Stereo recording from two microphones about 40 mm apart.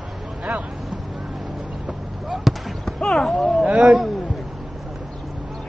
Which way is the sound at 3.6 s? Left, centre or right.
Right.